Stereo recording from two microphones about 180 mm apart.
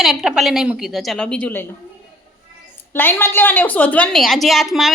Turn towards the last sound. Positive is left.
turn(degrees=0)  # may be behind; listen again after turning